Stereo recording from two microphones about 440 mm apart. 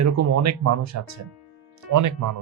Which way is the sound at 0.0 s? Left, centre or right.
Right.